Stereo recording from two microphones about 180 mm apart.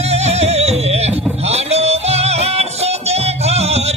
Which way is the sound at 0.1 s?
35° right (ahead or behind).